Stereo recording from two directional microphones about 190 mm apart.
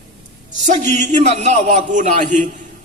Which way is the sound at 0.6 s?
40° right (ahead or behind).